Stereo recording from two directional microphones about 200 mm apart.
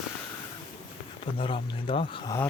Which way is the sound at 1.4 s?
25° left (ahead or behind).